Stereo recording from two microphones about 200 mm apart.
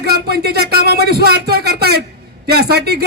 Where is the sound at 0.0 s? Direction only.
50° right (ahead or behind).